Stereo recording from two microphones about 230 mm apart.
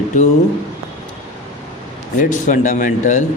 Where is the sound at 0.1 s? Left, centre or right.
Left.